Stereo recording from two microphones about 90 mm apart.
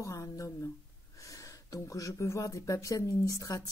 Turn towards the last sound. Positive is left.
turn(degrees=40)  # may be behind; listen again after turning